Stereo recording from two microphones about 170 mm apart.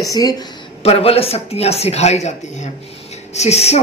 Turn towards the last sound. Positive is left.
turn(degrees=40)  # may be behind; listen again after turning